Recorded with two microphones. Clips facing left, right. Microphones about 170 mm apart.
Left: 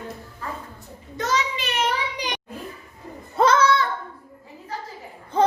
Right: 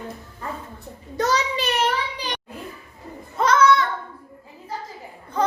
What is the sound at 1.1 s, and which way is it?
Child singing, 35° right (ahead or behind).